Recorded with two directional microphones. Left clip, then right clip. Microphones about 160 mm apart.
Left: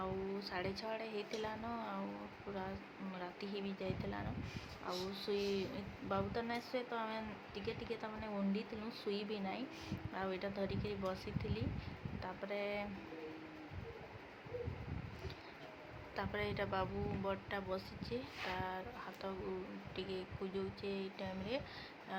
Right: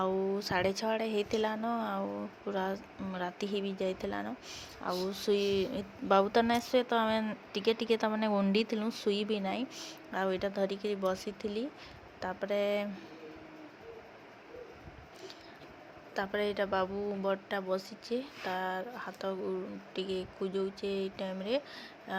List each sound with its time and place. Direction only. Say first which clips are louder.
0.0 s speech: right 11 dB; 50° right (ahead or behind)
3.2 s speech: right 11 dB; 50° right (ahead or behind)
16.1 s speech: right 9 dB; 40° right (ahead or behind)